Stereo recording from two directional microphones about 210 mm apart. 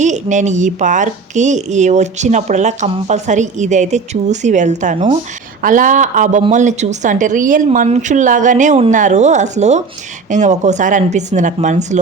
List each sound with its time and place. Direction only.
0.0 s a woman's voice: 35° right (ahead or behind)